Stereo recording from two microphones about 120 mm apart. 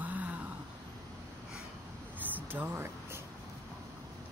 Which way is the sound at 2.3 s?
15° right (ahead or behind).